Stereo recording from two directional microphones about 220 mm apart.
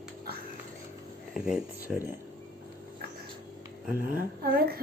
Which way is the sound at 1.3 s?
5° right (ahead or behind).